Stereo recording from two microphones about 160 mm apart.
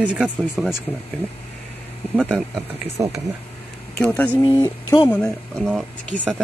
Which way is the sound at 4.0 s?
10° left (ahead or behind).